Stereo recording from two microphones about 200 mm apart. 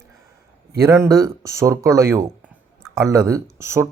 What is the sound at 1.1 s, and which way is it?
Speech, 15° right (ahead or behind).